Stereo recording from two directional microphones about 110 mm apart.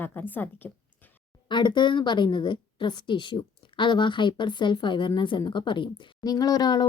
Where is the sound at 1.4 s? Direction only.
45° left (ahead or behind).